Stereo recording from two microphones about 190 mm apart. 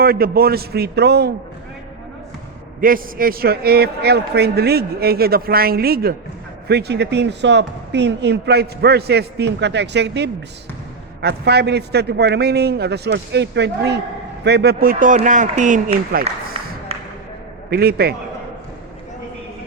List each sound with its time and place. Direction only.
0.0 s a man's voice: 50° right (ahead or behind)
2.8 s a man's voice: 50° right (ahead or behind)
17.7 s a man's voice: 55° right (ahead or behind)